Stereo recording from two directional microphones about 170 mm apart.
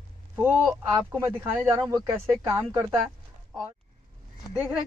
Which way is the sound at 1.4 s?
20° right (ahead or behind).